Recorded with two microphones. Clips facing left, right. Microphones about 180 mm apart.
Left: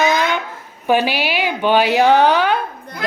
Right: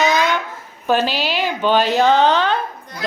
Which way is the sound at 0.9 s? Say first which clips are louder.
Left 1 dB; 15° left (ahead or behind).